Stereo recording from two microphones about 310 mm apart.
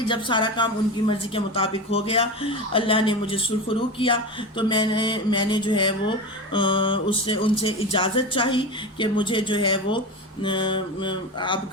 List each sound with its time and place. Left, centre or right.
0.1 s a woman's voice: centre